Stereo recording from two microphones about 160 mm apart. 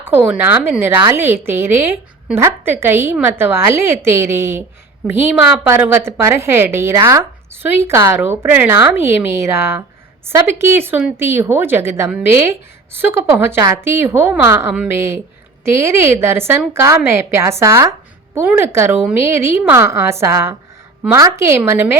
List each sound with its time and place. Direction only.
0.0 s a woman's voice: 10° right (ahead or behind)